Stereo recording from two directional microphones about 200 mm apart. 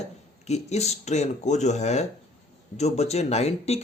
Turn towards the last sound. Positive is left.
turn(degrees=30)  # may be behind; listen again after turning